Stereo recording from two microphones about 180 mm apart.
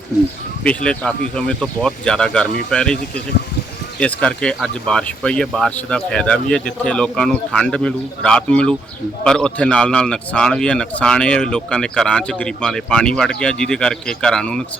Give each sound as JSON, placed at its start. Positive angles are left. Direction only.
{"t": 0.6, "sound": "speech", "side_deg": 5}
{"t": 4.0, "sound": "speech", "side_deg": 5}